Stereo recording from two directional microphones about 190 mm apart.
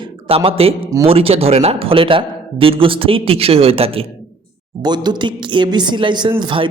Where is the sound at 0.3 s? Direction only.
30° right (ahead or behind).